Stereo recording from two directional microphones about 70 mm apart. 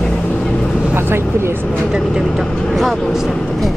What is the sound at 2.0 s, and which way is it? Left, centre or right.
Speech, centre.